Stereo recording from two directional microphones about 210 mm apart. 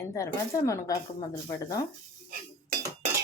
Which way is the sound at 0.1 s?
15° left (ahead or behind).